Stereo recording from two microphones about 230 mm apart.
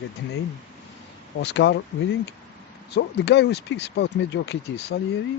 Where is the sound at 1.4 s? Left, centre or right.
Left.